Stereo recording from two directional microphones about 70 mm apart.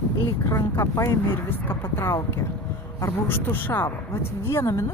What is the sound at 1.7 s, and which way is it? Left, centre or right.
Speech, left.